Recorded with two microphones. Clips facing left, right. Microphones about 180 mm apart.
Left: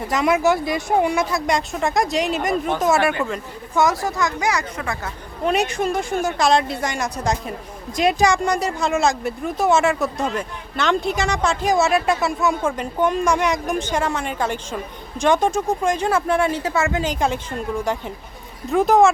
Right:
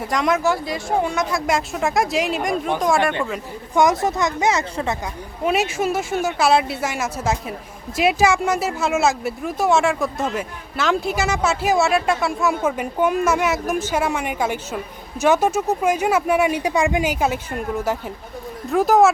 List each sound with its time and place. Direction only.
0.0 s speech: 5° left (ahead or behind)
3.8 s a woman's voice: 20° right (ahead or behind)
5.5 s speech: 5° right (ahead or behind)